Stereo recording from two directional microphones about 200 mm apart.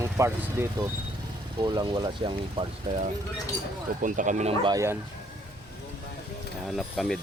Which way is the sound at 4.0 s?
40° right (ahead or behind).